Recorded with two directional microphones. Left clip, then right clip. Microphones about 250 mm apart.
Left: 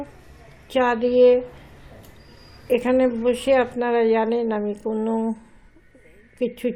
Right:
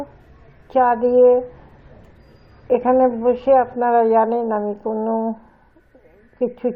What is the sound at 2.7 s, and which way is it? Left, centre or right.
A woman's voice, left.